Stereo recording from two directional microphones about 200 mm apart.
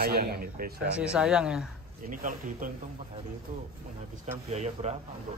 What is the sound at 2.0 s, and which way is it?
Speech, 40° right (ahead or behind).